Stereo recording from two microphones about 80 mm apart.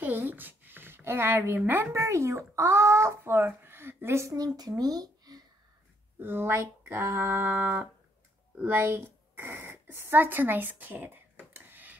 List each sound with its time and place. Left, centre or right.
0.0 s speech: right
4.4 s speech: right
6.2 s a sound: right
8.5 s speech: right
11.5 s dishes: right